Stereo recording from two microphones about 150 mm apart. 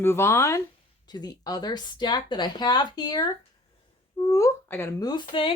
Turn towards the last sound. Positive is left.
turn(degrees=35)  # may be behind; listen again after turning